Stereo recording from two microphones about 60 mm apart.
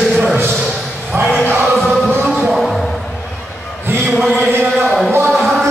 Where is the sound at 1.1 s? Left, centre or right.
Right.